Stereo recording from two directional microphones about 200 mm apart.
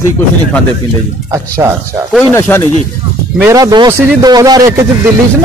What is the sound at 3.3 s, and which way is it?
A man's voice, 15° right (ahead or behind).